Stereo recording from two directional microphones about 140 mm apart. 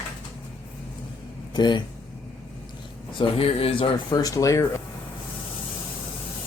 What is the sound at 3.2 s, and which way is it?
Speech, 40° left (ahead or behind).